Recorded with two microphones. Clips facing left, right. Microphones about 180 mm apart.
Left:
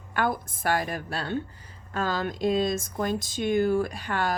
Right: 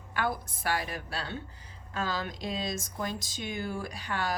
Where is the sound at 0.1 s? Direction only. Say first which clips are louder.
Left 5 dB; 50° left (ahead or behind).